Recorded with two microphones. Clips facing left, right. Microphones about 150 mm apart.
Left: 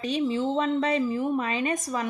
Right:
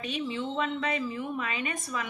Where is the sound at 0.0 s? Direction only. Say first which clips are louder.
Left 7 dB; 40° left (ahead or behind).